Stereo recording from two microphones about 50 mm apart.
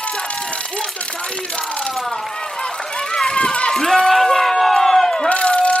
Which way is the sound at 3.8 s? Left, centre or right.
Centre.